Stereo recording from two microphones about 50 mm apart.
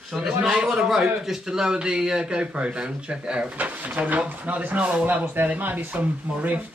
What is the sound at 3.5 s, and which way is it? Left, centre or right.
A man's voice, right.